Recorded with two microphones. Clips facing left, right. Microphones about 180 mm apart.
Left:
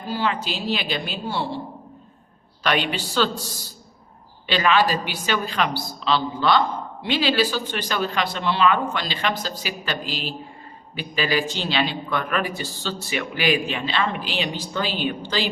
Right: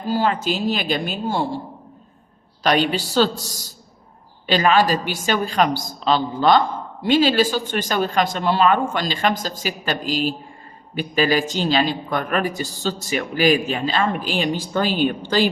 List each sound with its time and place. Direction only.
0.1 s speech: 45° right (ahead or behind)
2.6 s a woman's voice: 40° right (ahead or behind)